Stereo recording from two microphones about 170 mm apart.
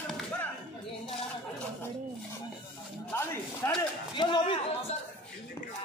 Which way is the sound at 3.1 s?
15° left (ahead or behind).